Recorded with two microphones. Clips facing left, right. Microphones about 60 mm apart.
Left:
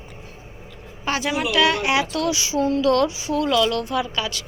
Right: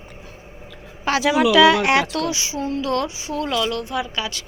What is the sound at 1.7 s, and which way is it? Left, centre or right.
Speech, right.